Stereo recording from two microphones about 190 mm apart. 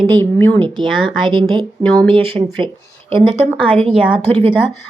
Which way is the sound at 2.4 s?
25° right (ahead or behind).